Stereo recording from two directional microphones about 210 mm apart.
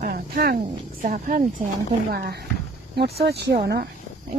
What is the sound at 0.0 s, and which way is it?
Speech, 45° right (ahead or behind).